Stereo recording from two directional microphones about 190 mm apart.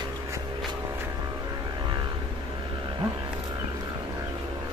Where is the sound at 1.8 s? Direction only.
25° right (ahead or behind).